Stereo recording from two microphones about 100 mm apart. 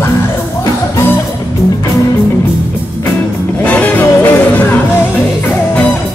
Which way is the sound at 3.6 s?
15° left (ahead or behind).